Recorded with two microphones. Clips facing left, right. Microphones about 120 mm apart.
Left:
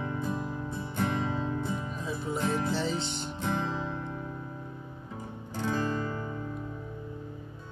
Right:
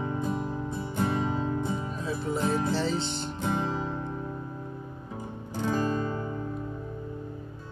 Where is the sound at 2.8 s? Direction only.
15° left (ahead or behind).